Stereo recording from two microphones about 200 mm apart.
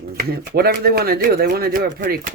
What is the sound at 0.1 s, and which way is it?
Speech, 50° right (ahead or behind).